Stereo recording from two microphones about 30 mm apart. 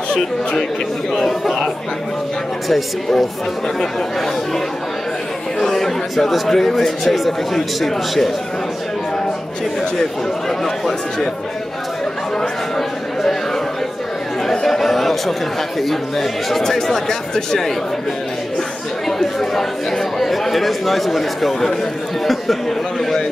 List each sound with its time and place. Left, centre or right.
0.1 s speech: left
1.4 s speech: centre
2.7 s speech: centre
5.6 s speech: centre
14.4 s chatter: centre
15.8 s speech: centre
16.6 s speech: centre
19.0 s speech: centre